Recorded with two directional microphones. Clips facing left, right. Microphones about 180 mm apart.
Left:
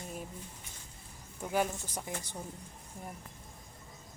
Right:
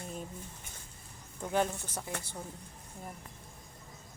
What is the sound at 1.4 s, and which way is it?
Speech, 10° left (ahead or behind).